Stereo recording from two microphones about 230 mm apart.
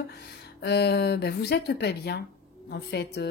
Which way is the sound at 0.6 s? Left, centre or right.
Left.